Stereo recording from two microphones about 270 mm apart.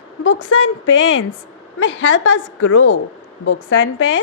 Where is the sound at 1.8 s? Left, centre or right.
Left.